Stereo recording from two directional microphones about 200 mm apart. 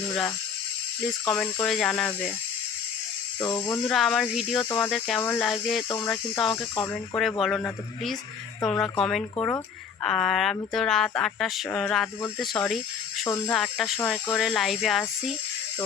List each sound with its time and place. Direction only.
0.1 s a sound: centre (ahead or behind)
1.3 s speech: 5° left (ahead or behind)
3.4 s speech: 20° left (ahead or behind)
3.8 s speech: centre (ahead or behind)
6.5 s speech: 15° left (ahead or behind)
7.4 s speech: centre (ahead or behind)